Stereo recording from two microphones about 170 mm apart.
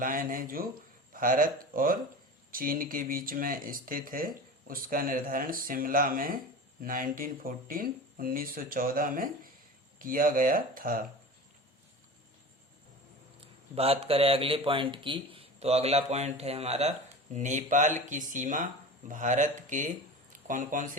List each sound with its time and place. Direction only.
0.0 s speech: 55° right (ahead or behind)
13.7 s speech: 35° right (ahead or behind)